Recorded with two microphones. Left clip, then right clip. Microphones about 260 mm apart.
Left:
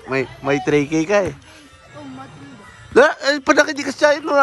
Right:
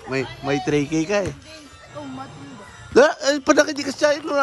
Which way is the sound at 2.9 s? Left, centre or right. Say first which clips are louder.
Left 2 dB; centre.